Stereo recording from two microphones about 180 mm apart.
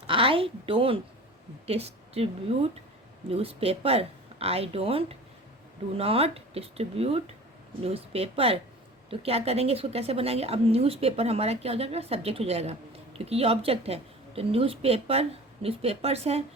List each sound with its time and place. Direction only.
0.1 s a woman's voice: 30° right (ahead or behind)